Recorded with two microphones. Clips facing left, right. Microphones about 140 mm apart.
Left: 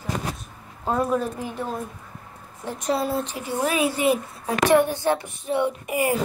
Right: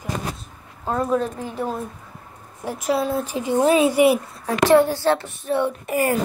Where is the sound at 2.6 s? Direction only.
5° right (ahead or behind).